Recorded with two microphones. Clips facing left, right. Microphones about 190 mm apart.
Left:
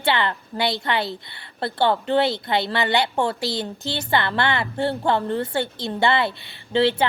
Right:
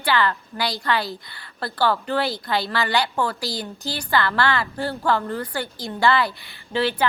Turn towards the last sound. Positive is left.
turn(degrees=25)  # may be behind; listen again after turning